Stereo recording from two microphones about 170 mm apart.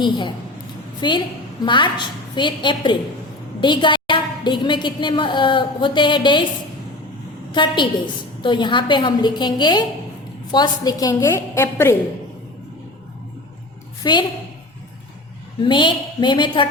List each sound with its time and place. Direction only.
0.0 s a woman's voice: 25° left (ahead or behind)
7.5 s a woman's voice: 30° left (ahead or behind)
14.0 s a woman's voice: 25° left (ahead or behind)
15.6 s a woman's voice: 30° left (ahead or behind)